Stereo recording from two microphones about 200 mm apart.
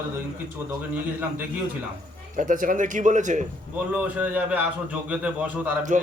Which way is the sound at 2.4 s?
40° right (ahead or behind).